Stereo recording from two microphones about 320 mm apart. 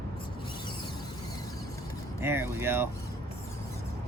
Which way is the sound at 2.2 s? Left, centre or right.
Centre.